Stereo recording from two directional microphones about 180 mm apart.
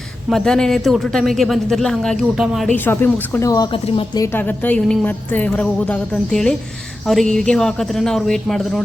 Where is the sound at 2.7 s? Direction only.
10° left (ahead or behind); by 4.2 s 30° left (ahead or behind).